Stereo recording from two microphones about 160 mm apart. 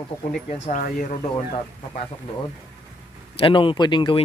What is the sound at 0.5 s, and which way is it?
Speech, 50° left (ahead or behind).